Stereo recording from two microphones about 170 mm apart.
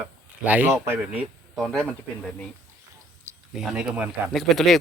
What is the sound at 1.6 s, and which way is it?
Speech, 5° left (ahead or behind).